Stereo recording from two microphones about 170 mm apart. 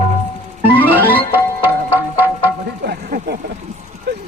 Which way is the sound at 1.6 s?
10° right (ahead or behind).